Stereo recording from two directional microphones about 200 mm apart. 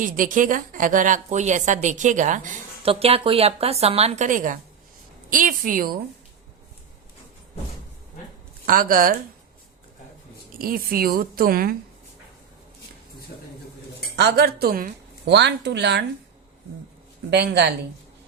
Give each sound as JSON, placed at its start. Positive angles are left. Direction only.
{"t": 0.0, "sound": "a woman's voice", "side_deg": -40}
{"t": 2.9, "sound": "a woman's voice", "side_deg": -30}
{"t": 8.6, "sound": "a woman's voice", "side_deg": -45}
{"t": 10.6, "sound": "a woman's voice", "side_deg": -45}
{"t": 14.2, "sound": "a woman's voice", "side_deg": -55}
{"t": 17.3, "sound": "a woman's voice", "side_deg": -55}